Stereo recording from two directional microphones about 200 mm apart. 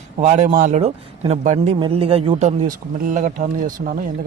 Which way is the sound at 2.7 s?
40° right (ahead or behind).